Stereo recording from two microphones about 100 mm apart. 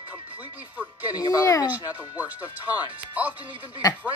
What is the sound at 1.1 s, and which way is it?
Speech, 35° left (ahead or behind).